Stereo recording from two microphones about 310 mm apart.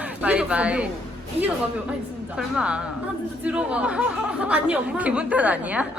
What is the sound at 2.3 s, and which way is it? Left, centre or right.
Speech, centre.